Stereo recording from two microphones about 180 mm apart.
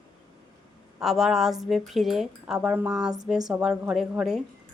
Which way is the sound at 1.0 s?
Centre (ahead or behind).